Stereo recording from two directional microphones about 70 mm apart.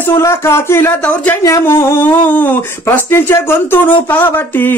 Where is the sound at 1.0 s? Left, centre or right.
Centre.